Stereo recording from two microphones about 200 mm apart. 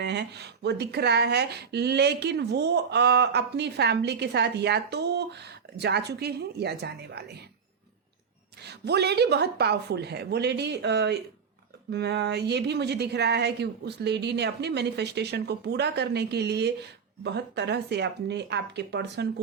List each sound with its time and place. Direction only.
0.0 s speech: 55° right (ahead or behind)
8.6 s speech: 55° right (ahead or behind)